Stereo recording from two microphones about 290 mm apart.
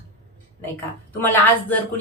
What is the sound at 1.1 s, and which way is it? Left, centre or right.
Speech, centre.